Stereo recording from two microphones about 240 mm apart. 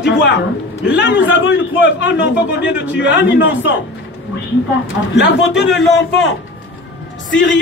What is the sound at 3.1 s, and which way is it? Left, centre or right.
Speech, left.